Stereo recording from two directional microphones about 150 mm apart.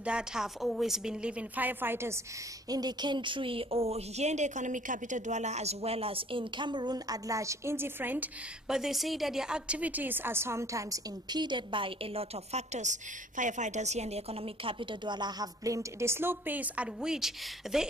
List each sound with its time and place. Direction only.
0.0 s a woman's voice: 5° right (ahead or behind)
2.7 s speech: 30° right (ahead or behind); by 17.8 s 5° right (ahead or behind)